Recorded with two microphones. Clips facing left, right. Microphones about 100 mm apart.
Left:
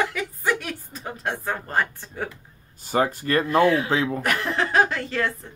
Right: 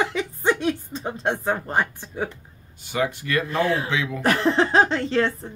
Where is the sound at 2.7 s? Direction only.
40° left (ahead or behind).